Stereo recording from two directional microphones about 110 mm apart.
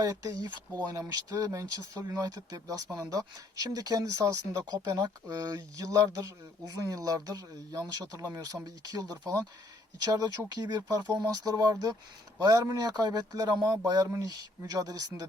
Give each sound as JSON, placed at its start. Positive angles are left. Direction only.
{"t": 0.0, "sound": "speech", "side_deg": -30}